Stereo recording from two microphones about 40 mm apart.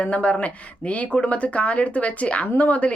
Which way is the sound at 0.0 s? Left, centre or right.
Left.